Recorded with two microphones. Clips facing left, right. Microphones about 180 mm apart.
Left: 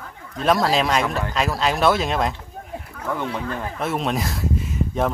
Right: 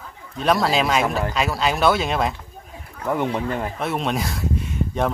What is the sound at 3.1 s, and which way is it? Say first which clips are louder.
Speech: right 4 dB; 25° right (ahead or behind).